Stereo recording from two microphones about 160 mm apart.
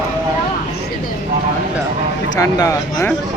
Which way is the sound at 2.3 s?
20° left (ahead or behind).